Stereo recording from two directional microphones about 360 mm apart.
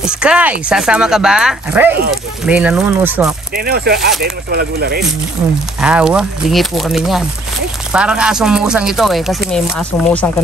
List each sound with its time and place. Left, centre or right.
0.0 s speech: centre
3.5 s speech: right
5.8 s speech: centre